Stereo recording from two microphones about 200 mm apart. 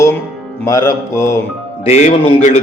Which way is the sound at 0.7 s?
15° left (ahead or behind).